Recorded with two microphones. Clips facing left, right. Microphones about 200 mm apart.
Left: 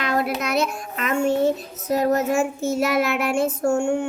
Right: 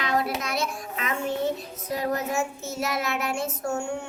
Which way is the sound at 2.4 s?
30° left (ahead or behind).